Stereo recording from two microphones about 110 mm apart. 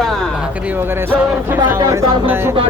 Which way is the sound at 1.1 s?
20° right (ahead or behind).